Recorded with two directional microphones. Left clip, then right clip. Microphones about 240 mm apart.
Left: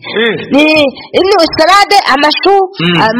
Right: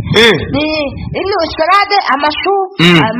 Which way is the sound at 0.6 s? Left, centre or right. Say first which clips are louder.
Left 8 dB; left.